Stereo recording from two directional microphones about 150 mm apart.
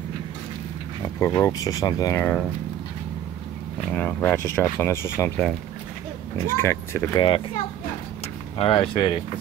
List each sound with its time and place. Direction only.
1.0 s speech: 20° left (ahead or behind)
3.9 s speech: 10° left (ahead or behind)
6.3 s speech: 15° left (ahead or behind)
7.2 s speech: 35° left (ahead or behind)
8.5 s speech: 40° left (ahead or behind)